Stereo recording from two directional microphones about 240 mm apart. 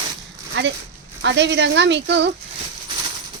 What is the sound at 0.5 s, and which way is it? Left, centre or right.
A woman's voice, right.